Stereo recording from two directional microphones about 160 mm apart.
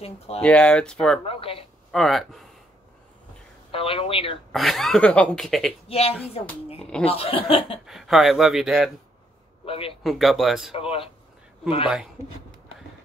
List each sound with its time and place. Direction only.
0.4 s speech: 5° left (ahead or behind)
1.2 s speech: 35° left (ahead or behind)
1.9 s speech: centre (ahead or behind)
3.7 s speech: 35° left (ahead or behind)
4.5 s speech: centre (ahead or behind)
5.9 s speech: 40° left (ahead or behind)
6.8 s speech: 5° left (ahead or behind)
7.1 s speech: 35° left (ahead or behind)
7.8 s speech: centre (ahead or behind)
9.7 s speech: 35° left (ahead or behind)
10.0 s speech: centre (ahead or behind)
10.7 s speech: 35° left (ahead or behind)
11.9 s speech: 5° right (ahead or behind)